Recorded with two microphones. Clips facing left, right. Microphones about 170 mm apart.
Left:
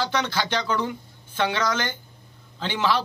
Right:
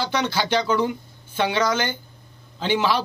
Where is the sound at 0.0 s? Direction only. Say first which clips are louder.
Right 2 dB; 10° right (ahead or behind).